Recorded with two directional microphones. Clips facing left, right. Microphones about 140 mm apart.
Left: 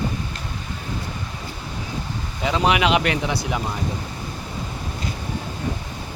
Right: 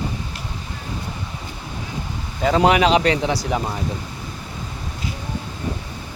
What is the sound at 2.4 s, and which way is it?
A man's voice, 45° right (ahead or behind).